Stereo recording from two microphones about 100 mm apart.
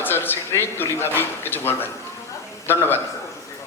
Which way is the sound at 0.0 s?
20° left (ahead or behind).